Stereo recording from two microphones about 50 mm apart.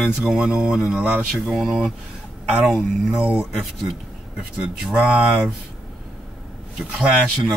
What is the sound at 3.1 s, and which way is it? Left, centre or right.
Speech, right.